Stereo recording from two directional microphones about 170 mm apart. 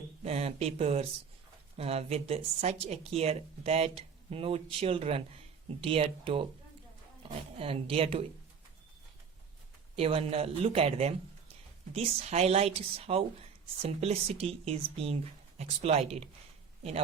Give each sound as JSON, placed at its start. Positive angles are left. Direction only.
{"t": 0.2, "sound": "speech", "side_deg": -40}
{"t": 9.9, "sound": "speech", "side_deg": -35}